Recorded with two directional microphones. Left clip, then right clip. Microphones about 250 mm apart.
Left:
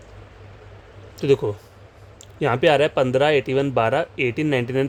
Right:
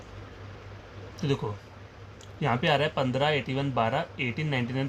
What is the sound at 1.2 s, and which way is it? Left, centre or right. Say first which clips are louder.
Speech: left 13 dB; left.